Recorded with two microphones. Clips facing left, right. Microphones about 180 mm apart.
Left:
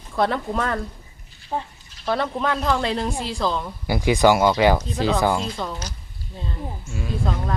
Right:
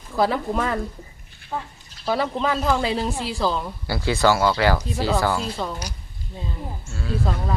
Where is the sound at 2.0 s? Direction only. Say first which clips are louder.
Even; 5° right (ahead or behind).